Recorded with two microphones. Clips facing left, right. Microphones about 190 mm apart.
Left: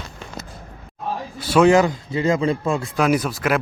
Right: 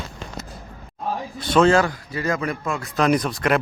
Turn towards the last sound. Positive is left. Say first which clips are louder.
# even
turn(degrees=5)  # may be behind; listen again after turning